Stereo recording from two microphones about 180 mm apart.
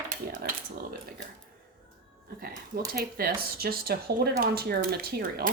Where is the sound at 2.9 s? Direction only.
55° right (ahead or behind).